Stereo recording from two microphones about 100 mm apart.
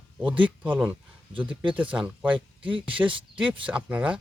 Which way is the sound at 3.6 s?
15° right (ahead or behind).